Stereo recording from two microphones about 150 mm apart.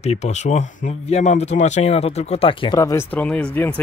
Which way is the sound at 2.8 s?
20° left (ahead or behind).